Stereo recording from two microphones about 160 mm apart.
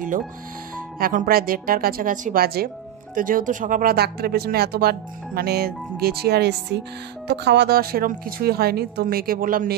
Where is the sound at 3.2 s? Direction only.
60° right (ahead or behind).